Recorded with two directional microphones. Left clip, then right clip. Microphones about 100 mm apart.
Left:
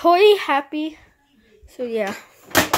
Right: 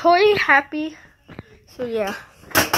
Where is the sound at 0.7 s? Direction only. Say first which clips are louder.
Left 1 dB; 5° left (ahead or behind).